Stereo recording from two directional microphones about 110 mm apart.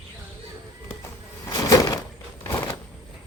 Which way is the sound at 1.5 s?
30° left (ahead or behind).